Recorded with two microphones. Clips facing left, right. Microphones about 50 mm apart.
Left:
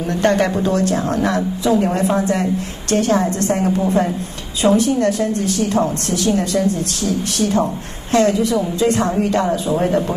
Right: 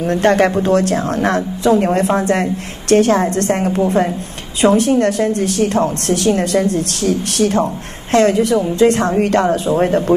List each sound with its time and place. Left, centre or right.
0.0 s a woman's voice: right
9.8 s speech: right